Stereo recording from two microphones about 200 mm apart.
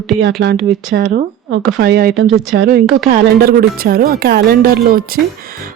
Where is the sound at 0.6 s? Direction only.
40° right (ahead or behind).